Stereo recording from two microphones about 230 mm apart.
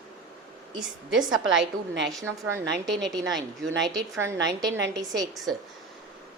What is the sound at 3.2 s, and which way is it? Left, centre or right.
A woman's voice, centre.